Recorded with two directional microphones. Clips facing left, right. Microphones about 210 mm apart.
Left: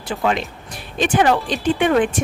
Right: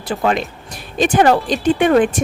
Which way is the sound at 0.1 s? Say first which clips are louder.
Right 3 dB; 40° right (ahead or behind).